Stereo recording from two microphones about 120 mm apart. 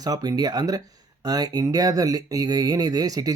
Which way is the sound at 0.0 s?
30° right (ahead or behind).